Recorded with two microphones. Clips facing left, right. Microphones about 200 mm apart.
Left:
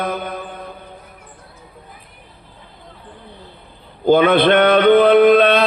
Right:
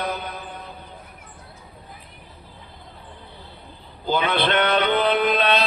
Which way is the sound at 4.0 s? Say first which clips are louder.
Left 10 dB; 55° left (ahead or behind).